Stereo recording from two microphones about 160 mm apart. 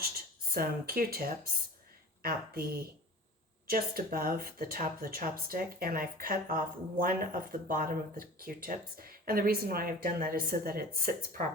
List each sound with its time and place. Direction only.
0.5 s speech: 70° right (ahead or behind)